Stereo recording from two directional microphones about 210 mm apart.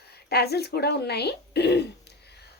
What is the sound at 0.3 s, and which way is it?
Speech, 50° left (ahead or behind).